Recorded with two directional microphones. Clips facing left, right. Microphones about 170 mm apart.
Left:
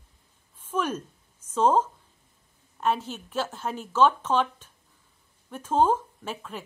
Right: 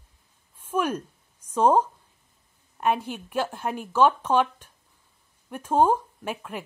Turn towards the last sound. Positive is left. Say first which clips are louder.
# right 3 dB
turn(degrees=-15)  # may be behind; listen again after turning